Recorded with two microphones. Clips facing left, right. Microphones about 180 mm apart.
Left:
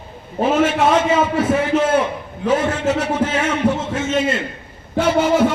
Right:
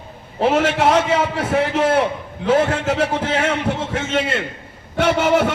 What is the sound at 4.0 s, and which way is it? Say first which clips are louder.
A man's voice: left 2 dB; 65° right (ahead or behind).